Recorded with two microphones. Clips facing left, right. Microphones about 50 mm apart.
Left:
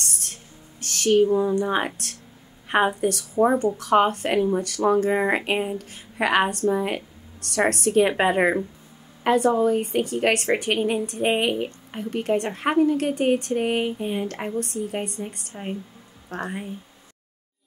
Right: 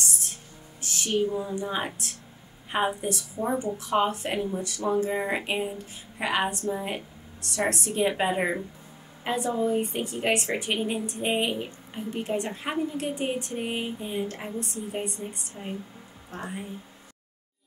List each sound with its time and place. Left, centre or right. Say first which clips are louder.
0.0 s a sound: even; left
1.3 s speech: left 8 dB; left
3.0 s speech: left 7 dB; left
3.3 s a woman's voice: left 10 dB; left
15.5 s speech: left 6 dB; left
16.3 s speech: left 6 dB; left